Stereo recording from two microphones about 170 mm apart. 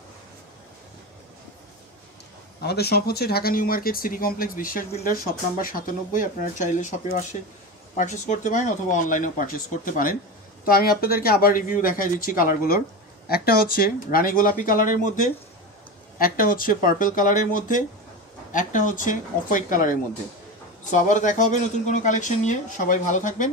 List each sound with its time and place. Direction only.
2.6 s speech: 70° left (ahead or behind); by 23.5 s 45° left (ahead or behind)